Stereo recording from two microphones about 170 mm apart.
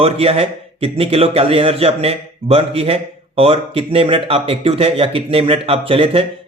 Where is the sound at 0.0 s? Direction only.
35° right (ahead or behind).